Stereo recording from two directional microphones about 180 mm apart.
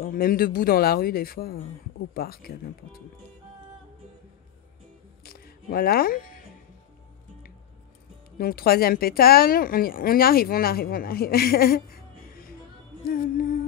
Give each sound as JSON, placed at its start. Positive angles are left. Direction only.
{"t": 0.0, "sound": "a woman's voice", "side_deg": 55}
{"t": 5.2, "sound": "music", "side_deg": 55}
{"t": 8.4, "sound": "a woman's voice", "side_deg": 55}